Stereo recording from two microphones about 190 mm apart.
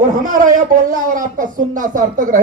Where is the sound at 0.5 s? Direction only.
45° right (ahead or behind).